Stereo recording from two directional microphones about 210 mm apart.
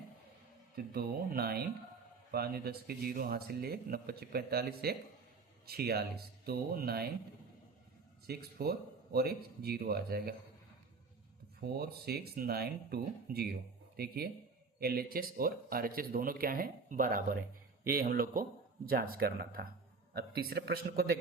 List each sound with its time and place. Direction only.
0.9 s speech: 45° right (ahead or behind)
8.3 s speech: 50° right (ahead or behind)
11.8 s speech: 50° right (ahead or behind)